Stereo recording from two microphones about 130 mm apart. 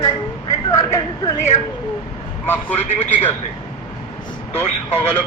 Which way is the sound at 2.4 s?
15° left (ahead or behind).